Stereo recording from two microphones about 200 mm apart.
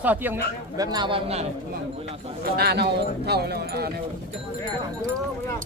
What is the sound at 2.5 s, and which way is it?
Speech, 55° right (ahead or behind).